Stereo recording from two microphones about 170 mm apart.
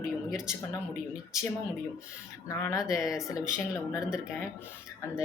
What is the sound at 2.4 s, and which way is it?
Speech, 20° left (ahead or behind).